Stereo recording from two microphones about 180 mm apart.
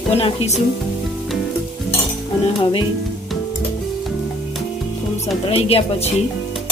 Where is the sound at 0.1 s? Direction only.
35° left (ahead or behind).